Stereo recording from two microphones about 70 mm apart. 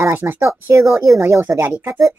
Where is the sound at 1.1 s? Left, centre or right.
Right.